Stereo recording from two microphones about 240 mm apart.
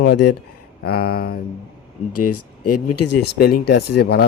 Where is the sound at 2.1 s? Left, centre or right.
Left.